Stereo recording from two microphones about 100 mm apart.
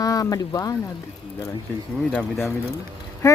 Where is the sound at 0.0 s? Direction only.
35° left (ahead or behind).